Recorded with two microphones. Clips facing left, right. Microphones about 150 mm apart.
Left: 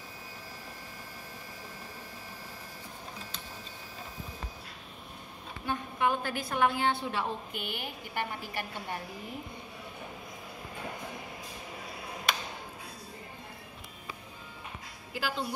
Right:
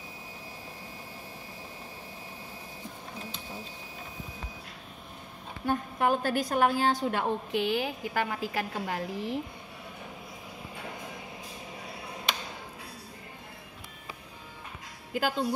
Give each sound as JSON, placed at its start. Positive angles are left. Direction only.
{"t": 5.7, "sound": "a woman's voice", "side_deg": -40}
{"t": 7.5, "sound": "a woman's voice", "side_deg": -90}
{"t": 15.1, "sound": "speech", "side_deg": -50}